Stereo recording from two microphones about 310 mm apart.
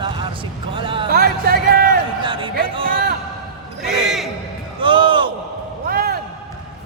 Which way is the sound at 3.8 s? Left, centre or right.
Centre.